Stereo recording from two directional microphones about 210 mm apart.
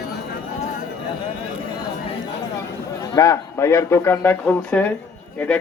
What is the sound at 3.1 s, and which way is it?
Speech, 15° left (ahead or behind).